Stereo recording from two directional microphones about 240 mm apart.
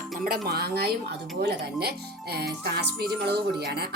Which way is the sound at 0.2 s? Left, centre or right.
Right.